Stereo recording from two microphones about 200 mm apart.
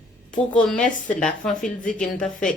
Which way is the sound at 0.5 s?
5° left (ahead or behind).